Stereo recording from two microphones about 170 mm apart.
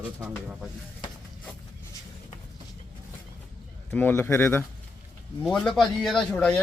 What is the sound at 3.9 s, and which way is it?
A man's voice, 10° left (ahead or behind).